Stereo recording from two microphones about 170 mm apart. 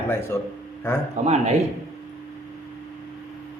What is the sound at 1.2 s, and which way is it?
Speech, 40° right (ahead or behind).